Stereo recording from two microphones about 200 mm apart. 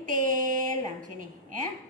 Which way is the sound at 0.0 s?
40° right (ahead or behind).